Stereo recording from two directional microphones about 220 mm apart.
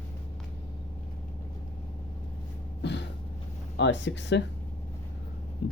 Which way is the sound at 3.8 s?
55° left (ahead or behind).